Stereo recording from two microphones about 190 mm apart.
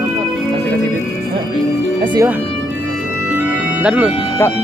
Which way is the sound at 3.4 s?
10° right (ahead or behind).